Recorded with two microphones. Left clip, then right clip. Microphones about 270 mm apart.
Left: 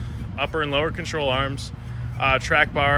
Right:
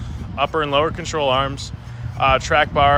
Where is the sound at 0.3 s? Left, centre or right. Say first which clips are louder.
Right 5 dB; centre.